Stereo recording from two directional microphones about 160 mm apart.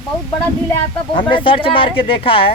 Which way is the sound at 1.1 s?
30° left (ahead or behind).